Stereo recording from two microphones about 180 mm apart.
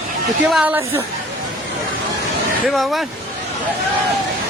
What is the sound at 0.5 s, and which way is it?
Speech, 5° right (ahead or behind).